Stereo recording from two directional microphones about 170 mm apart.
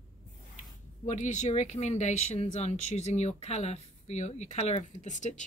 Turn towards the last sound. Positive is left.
turn(degrees=45)  # may be behind; listen again after turning